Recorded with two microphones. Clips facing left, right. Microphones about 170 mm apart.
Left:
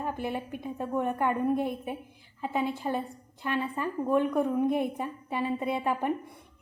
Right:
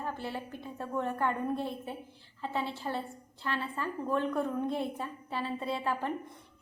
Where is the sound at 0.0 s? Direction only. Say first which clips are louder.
Left 5 dB; 15° left (ahead or behind).